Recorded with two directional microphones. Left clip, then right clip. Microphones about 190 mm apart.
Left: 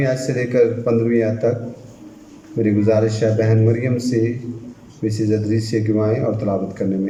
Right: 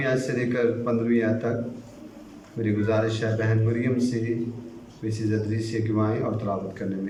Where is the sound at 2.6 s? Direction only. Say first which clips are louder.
Left 8 dB; 30° left (ahead or behind).